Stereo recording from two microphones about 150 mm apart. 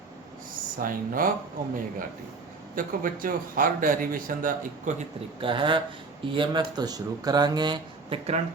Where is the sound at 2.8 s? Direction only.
65° right (ahead or behind).